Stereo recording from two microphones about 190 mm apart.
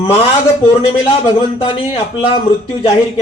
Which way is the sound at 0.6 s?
30° left (ahead or behind).